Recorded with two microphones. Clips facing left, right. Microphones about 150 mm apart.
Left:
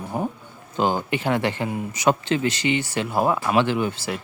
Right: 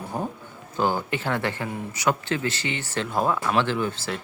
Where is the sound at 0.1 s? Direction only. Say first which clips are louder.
Left 4 dB; 15° left (ahead or behind).